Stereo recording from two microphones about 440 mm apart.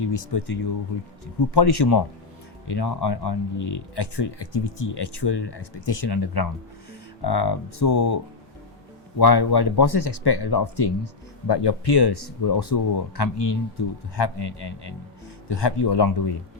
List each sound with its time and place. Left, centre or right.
0.0 s speech: left